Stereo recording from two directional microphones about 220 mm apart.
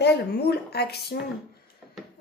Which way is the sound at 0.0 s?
50° left (ahead or behind).